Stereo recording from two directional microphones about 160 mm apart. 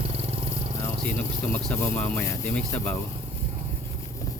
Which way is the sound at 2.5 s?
5° left (ahead or behind).